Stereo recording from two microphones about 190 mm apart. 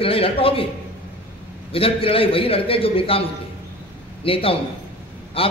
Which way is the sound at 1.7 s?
30° left (ahead or behind).